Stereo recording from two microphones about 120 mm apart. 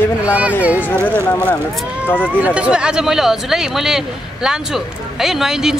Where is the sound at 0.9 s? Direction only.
15° left (ahead or behind).